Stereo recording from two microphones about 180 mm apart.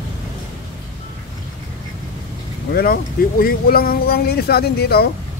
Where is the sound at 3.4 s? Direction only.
55° left (ahead or behind).